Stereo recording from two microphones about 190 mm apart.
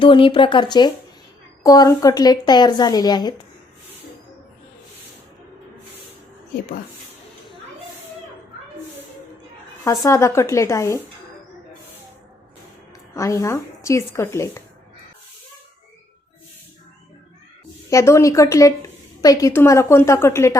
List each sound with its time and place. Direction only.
0.0 s a woman's voice: 25° left (ahead or behind)
9.8 s a woman's voice: 15° left (ahead or behind)
13.1 s a woman's voice: 15° left (ahead or behind)
17.9 s a woman's voice: 15° left (ahead or behind)